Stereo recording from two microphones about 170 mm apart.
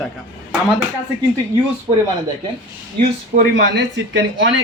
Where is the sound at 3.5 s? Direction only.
90° right.